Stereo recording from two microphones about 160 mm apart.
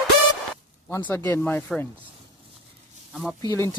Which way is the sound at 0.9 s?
15° left (ahead or behind).